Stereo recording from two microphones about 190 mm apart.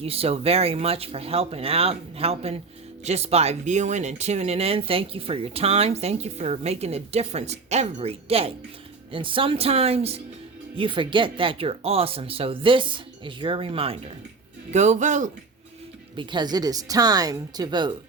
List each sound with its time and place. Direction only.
0.0 s speech: 30° right (ahead or behind)
16.1 s speech: 25° right (ahead or behind)